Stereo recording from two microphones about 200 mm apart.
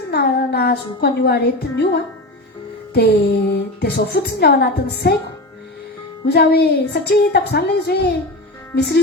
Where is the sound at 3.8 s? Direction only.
55° left (ahead or behind).